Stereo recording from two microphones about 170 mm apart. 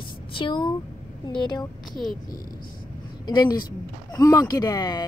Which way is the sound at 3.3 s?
25° left (ahead or behind).